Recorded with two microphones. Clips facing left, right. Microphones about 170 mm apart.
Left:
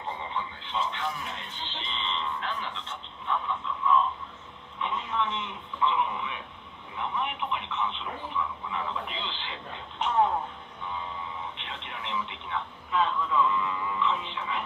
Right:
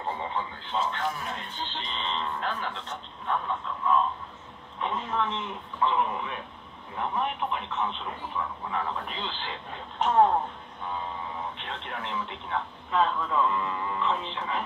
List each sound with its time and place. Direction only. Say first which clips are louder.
0.0 s speech: right 3 dB; 40° right (ahead or behind)
11.5 s speech: right 4 dB; 45° right (ahead or behind)